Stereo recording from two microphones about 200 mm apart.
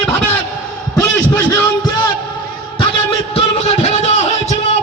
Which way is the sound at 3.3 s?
30° left (ahead or behind).